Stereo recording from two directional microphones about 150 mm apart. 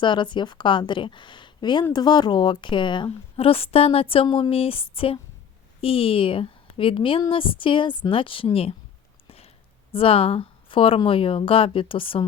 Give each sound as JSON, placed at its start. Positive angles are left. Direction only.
{"t": 0.0, "sound": "a woman's voice", "side_deg": 30}
{"t": 9.9, "sound": "a woman's voice", "side_deg": 40}